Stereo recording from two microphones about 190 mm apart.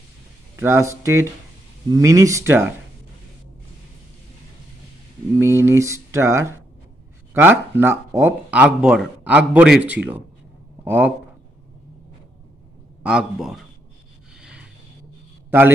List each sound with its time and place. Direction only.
0.6 s speech: 15° right (ahead or behind)
5.4 s speech: 15° right (ahead or behind)
13.0 s a man's voice: 5° right (ahead or behind)